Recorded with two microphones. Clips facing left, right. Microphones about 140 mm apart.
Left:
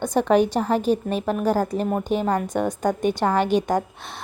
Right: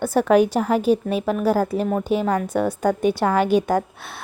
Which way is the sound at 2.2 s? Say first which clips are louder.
Right 1 dB; 10° left (ahead or behind).